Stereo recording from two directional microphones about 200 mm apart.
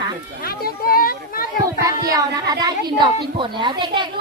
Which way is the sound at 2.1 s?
20° right (ahead or behind).